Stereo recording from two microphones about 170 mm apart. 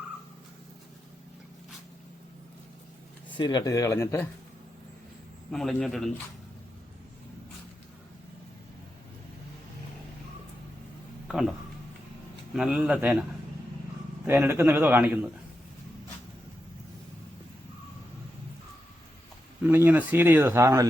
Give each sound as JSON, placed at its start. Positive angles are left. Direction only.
{"t": 3.3, "sound": "speech", "side_deg": 25}
{"t": 5.5, "sound": "speech", "side_deg": 0}
{"t": 11.3, "sound": "speech", "side_deg": 0}
{"t": 12.5, "sound": "speech", "side_deg": -5}
{"t": 14.3, "sound": "speech", "side_deg": -15}
{"t": 19.6, "sound": "speech", "side_deg": -10}